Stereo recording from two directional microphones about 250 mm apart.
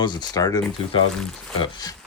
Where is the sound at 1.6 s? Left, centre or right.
Centre.